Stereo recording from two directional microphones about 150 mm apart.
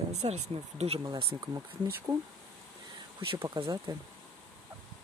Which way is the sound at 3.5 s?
30° right (ahead or behind).